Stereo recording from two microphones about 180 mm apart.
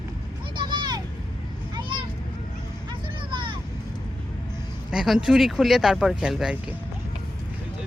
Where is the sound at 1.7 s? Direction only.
25° right (ahead or behind).